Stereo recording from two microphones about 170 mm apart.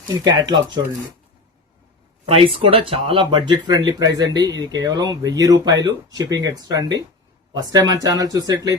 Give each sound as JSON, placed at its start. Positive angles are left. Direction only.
{"t": 0.3, "sound": "speech", "side_deg": -25}
{"t": 2.2, "sound": "speech", "side_deg": -35}